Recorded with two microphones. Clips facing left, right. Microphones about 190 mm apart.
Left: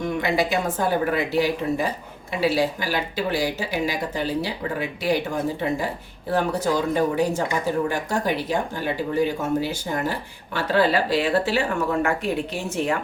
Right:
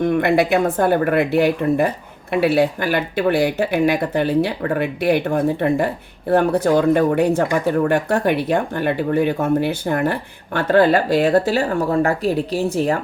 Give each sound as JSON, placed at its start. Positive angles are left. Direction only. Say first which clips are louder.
{"t": 0.0, "sound": "speech", "louder": "right 7 dB", "side_deg": -55}